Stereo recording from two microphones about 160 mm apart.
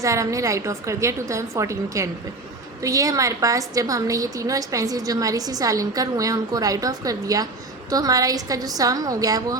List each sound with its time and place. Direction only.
0.0 s a woman's voice: 20° right (ahead or behind)